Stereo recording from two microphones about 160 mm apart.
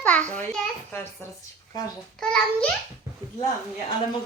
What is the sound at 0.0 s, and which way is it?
A child's voice, 10° left (ahead or behind).